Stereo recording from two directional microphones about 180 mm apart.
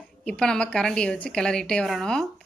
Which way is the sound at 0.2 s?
5° left (ahead or behind).